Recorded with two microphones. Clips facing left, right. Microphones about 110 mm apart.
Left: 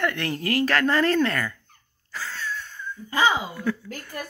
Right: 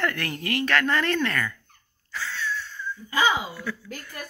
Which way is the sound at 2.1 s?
40° left (ahead or behind).